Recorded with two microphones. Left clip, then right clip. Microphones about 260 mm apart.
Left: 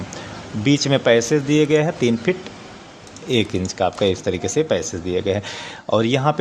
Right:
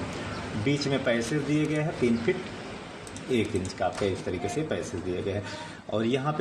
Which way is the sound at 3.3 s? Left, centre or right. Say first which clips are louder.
Left 8 dB; left.